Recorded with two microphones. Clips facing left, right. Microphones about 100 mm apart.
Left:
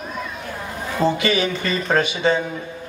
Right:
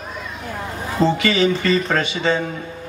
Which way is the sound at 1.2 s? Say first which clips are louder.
Right 3 dB; 20° left (ahead or behind).